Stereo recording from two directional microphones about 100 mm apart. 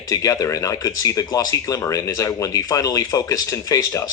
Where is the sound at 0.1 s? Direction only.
35° left (ahead or behind).